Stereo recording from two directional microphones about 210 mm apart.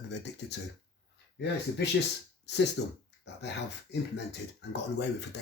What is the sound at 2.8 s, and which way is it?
Speech, 60° left (ahead or behind).